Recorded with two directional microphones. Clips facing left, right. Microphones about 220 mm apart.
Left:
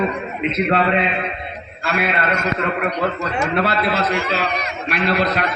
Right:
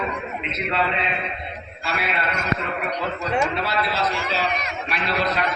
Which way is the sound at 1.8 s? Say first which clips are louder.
Left 6 dB; 55° left (ahead or behind).